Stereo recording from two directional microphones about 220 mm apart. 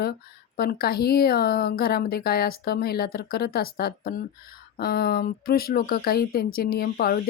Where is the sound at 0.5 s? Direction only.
45° left (ahead or behind).